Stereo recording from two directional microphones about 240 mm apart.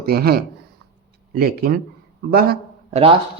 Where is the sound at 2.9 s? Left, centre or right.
Right.